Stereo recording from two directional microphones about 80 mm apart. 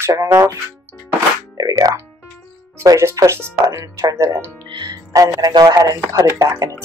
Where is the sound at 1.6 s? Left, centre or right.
Right.